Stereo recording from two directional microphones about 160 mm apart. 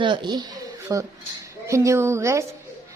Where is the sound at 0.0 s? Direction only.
30° right (ahead or behind).